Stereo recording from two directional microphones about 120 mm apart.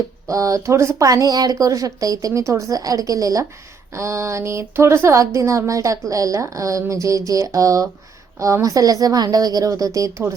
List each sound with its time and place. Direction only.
0.3 s a woman's voice: 25° right (ahead or behind)